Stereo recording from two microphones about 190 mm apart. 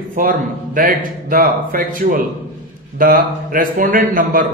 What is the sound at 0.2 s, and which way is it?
A man's voice, 45° right (ahead or behind).